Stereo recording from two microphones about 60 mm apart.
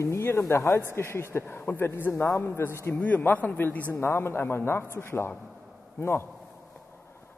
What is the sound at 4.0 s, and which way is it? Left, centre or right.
A woman's voice, left.